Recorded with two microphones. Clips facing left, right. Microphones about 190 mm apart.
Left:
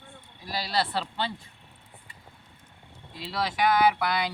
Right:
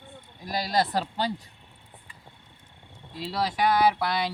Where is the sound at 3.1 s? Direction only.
40° right (ahead or behind).